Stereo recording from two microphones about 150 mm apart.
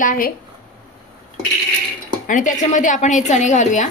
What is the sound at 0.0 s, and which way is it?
Speech, 65° left (ahead or behind).